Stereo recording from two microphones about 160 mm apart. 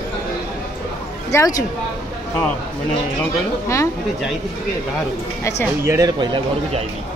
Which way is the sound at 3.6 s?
20° left (ahead or behind).